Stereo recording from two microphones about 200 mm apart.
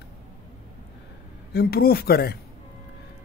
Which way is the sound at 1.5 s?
50° left (ahead or behind).